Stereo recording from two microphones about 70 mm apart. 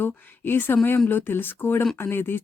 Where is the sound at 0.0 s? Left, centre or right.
Left.